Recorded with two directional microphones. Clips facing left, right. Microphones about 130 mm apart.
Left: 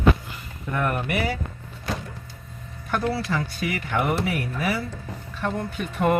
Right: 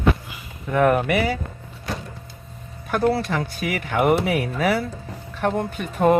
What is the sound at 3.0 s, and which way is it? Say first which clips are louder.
Speech: right 6 dB; 50° right (ahead or behind).